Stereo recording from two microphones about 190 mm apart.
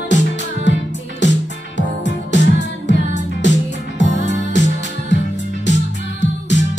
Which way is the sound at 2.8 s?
65° left (ahead or behind).